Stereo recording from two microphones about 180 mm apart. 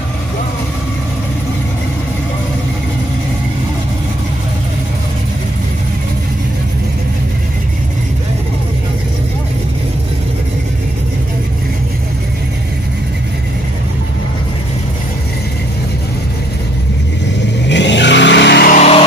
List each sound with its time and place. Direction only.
17.6 s vehicle: 80° left; by 18.8 s 65° left (ahead or behind)
18.8 s music: 35° left (ahead or behind)